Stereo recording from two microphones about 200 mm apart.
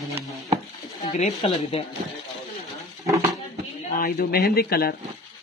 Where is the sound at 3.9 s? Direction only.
45° left (ahead or behind).